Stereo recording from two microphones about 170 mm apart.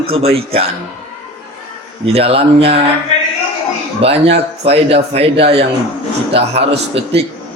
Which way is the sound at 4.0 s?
35° right (ahead or behind).